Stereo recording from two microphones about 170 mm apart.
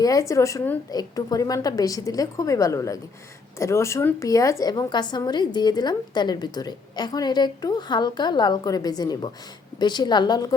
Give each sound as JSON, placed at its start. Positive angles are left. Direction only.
{"t": 0.0, "sound": "a woman's voice", "side_deg": 20}